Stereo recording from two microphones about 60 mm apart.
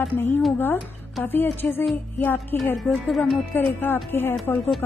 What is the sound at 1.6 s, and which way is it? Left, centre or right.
Speech, left.